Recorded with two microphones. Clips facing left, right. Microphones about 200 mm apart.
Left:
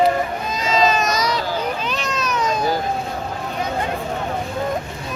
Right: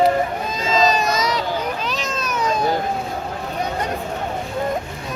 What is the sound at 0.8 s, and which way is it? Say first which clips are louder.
Baby cry: even; 35° right (ahead or behind).